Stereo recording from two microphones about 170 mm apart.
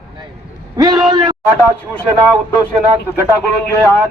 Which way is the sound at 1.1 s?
25° right (ahead or behind).